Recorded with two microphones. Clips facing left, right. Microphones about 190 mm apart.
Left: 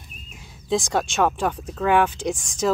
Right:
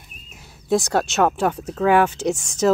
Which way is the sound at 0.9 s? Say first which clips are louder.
Right 2 dB; 5° right (ahead or behind).